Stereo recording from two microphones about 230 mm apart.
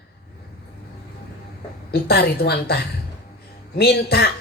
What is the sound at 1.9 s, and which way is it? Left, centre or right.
A man's voice, left.